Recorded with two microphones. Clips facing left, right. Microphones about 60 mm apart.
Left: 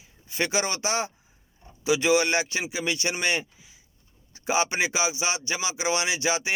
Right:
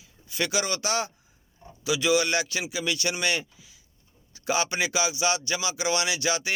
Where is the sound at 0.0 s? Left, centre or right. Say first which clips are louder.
Left 1 dB; left.